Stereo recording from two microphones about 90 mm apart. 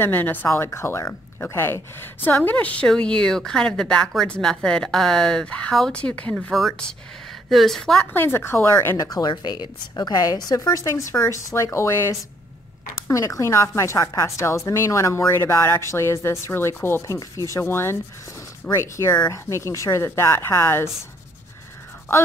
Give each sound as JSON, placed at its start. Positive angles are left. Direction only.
{"t": 0.0, "sound": "speech", "side_deg": 20}
{"t": 2.4, "sound": "speech", "side_deg": 15}
{"t": 6.5, "sound": "a woman's voice", "side_deg": 0}
{"t": 8.0, "sound": "speech", "side_deg": 25}
{"t": 8.9, "sound": "speech", "side_deg": 45}
{"t": 9.3, "sound": "a woman's voice", "side_deg": 60}